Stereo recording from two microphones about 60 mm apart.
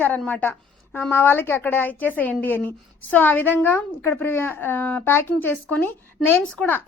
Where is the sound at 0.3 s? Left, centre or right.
Left.